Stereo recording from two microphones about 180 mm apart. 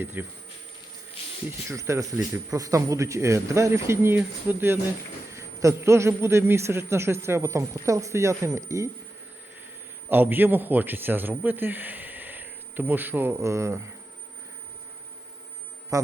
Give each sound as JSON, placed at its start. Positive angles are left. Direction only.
{"t": 0.0, "sound": "speech", "side_deg": -15}
{"t": 1.5, "sound": "speech", "side_deg": -15}
{"t": 10.1, "sound": "a man's voice", "side_deg": -10}
{"t": 15.9, "sound": "speech", "side_deg": -20}